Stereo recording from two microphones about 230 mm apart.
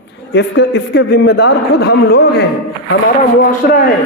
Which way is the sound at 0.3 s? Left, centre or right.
Left.